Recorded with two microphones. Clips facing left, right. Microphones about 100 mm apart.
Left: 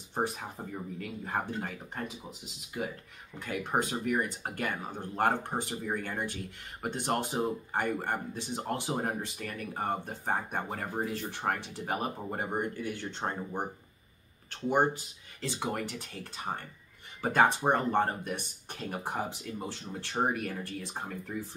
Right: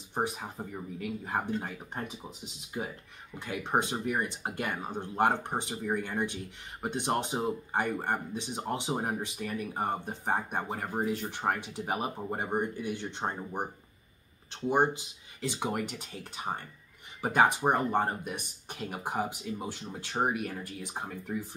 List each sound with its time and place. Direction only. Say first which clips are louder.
0.1 s speech: even; 15° right (ahead or behind)
3.3 s speech: right 1 dB; 20° right (ahead or behind)
17.2 s speech: even; 15° right (ahead or behind)